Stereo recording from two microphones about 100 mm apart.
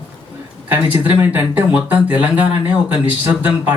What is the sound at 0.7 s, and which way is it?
Speech, 20° right (ahead or behind).